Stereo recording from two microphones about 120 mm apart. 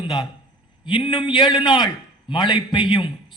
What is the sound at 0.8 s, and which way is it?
A man's voice, 45° left (ahead or behind).